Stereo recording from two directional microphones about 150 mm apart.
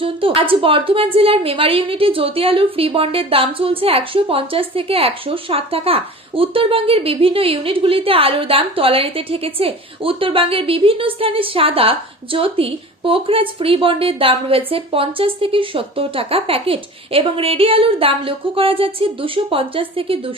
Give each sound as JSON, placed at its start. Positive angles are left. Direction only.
{"t": 0.0, "sound": "a woman's voice", "side_deg": -35}